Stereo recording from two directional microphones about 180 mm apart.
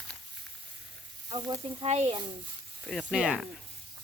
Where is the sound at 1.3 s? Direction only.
25° right (ahead or behind).